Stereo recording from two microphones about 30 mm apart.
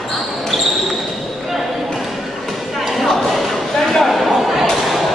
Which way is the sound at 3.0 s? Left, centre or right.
Centre.